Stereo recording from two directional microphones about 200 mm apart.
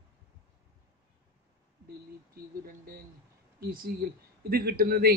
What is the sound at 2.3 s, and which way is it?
A man's voice, 50° right (ahead or behind).